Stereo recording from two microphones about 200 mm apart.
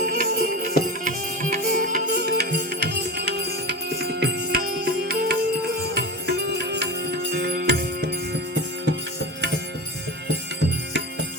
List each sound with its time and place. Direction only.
0.0 s music: 50° right (ahead or behind)